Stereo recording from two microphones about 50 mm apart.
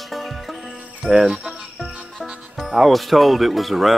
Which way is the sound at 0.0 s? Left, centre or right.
Centre.